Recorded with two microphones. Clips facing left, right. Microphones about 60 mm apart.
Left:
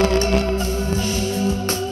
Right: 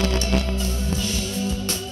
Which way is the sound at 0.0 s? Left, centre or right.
Left.